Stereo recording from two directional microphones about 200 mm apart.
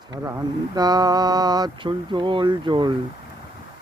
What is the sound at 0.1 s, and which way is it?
Mantra, 20° right (ahead or behind).